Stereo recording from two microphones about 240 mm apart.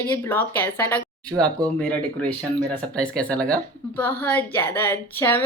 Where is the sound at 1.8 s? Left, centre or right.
Centre.